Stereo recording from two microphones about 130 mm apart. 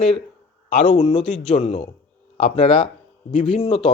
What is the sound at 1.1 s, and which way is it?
Speech, 60° left (ahead or behind).